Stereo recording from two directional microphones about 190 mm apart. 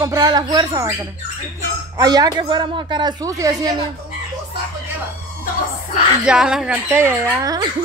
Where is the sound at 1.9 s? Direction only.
20° right (ahead or behind).